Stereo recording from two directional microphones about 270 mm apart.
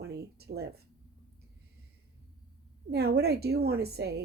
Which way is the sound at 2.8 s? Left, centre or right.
Right.